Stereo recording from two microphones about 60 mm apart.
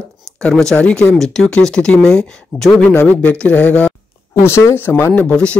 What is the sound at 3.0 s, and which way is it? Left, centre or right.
Speech, centre.